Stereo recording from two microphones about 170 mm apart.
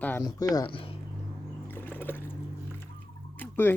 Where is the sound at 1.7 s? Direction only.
10° left (ahead or behind).